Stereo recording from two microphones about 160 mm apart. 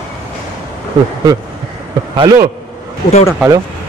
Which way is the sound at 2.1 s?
25° right (ahead or behind).